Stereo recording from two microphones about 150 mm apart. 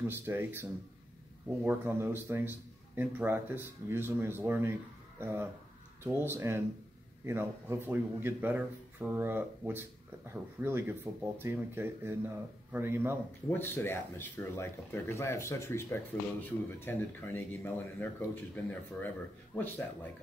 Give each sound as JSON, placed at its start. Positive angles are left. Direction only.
{"t": 0.0, "sound": "speech", "side_deg": -15}
{"t": 13.5, "sound": "speech", "side_deg": 15}